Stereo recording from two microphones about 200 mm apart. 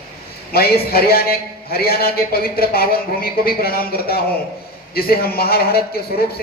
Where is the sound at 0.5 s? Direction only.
50° left (ahead or behind).